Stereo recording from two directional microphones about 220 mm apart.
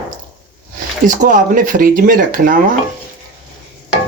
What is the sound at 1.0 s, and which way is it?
Speech, 35° right (ahead or behind).